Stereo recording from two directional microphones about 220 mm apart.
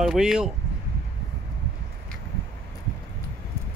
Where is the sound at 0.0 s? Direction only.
Centre (ahead or behind).